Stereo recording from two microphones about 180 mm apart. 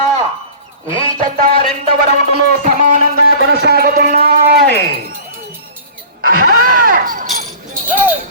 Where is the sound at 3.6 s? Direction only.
60° right (ahead or behind).